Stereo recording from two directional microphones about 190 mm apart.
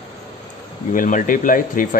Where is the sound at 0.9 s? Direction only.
45° left (ahead or behind).